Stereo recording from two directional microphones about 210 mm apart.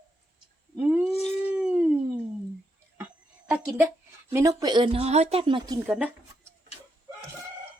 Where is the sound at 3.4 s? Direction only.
5° right (ahead or behind).